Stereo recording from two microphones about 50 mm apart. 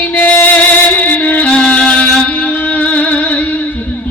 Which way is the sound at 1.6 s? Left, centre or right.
Centre.